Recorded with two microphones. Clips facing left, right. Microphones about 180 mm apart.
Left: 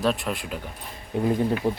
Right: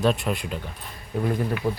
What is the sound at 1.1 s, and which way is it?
Speech, 20° left (ahead or behind).